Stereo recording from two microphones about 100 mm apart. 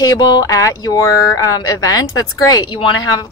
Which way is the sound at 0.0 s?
40° left (ahead or behind).